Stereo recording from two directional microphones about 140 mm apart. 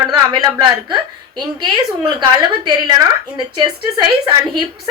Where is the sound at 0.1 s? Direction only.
30° right (ahead or behind).